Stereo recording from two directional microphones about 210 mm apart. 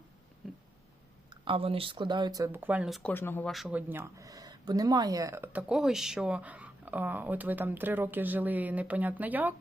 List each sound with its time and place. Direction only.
0.4 s a sound: centre (ahead or behind)
1.3 s speech: 25° right (ahead or behind); by 3.5 s 10° left (ahead or behind)
3.5 s speech: 5° right (ahead or behind)